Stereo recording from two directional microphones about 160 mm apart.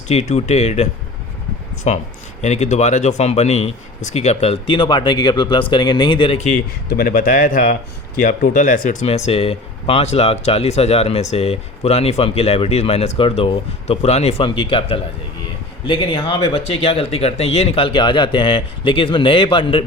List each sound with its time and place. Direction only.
0.1 s speech: 45° left (ahead or behind)
1.9 s speech: 45° left (ahead or behind)
6.9 s speech: 70° left (ahead or behind)
8.9 s speech: 45° left (ahead or behind)